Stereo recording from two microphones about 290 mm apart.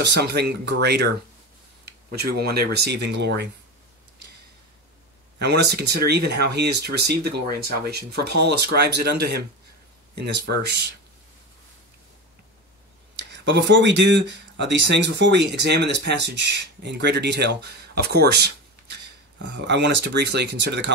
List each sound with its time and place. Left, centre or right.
0.0 s speech: right
5.4 s speech: right
13.2 s speech: right